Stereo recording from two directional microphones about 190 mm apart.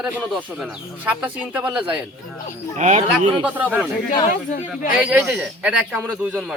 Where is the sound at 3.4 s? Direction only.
10° right (ahead or behind).